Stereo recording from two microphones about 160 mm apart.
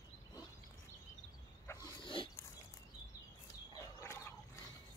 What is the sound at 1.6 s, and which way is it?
Wild animals, 25° left (ahead or behind).